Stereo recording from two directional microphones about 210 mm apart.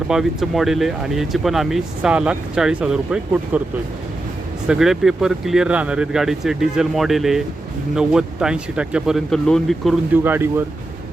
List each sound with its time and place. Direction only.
0.1 s speech: centre (ahead or behind)
4.7 s speech: centre (ahead or behind)
10.2 s speech: 10° right (ahead or behind)